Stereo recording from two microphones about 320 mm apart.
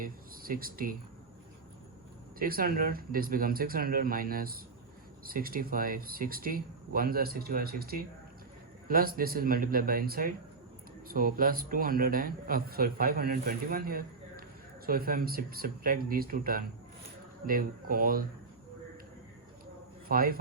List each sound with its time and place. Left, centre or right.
0.0 s speech: right
2.4 s a man's voice: right
20.1 s a man's voice: right